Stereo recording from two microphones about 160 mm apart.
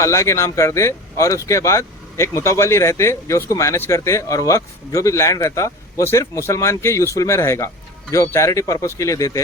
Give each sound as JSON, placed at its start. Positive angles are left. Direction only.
{"t": 0.0, "sound": "speech", "side_deg": 20}